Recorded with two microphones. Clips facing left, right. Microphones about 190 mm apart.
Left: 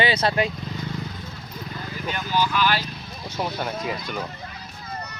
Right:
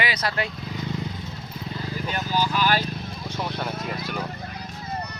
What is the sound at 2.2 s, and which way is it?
Speech, 40° right (ahead or behind).